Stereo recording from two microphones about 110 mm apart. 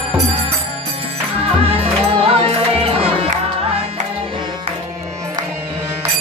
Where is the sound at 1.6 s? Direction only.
60° right (ahead or behind).